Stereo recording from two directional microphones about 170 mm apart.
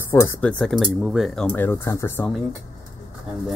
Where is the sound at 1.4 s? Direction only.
10° left (ahead or behind).